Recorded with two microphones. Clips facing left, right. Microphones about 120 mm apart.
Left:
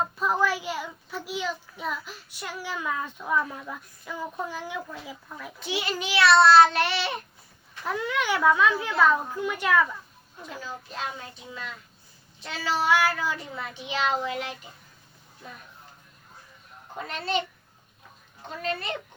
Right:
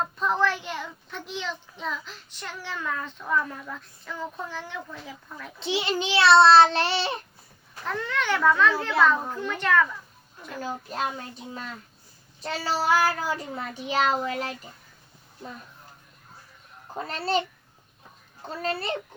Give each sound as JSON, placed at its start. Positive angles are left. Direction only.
{"t": 0.0, "sound": "a child's voice", "side_deg": 5}
{"t": 5.5, "sound": "a child's voice", "side_deg": -25}
{"t": 7.9, "sound": "a child's voice", "side_deg": 10}
{"t": 10.6, "sound": "a woman's voice", "side_deg": -45}
{"t": 12.4, "sound": "a child's voice", "side_deg": -40}
{"t": 16.9, "sound": "a child's voice", "side_deg": -35}
{"t": 18.4, "sound": "a child's voice", "side_deg": -35}